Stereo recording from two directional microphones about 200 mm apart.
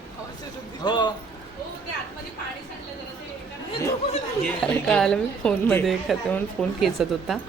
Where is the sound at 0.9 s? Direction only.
20° left (ahead or behind).